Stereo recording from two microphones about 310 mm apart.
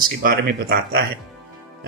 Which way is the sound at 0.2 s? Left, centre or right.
Right.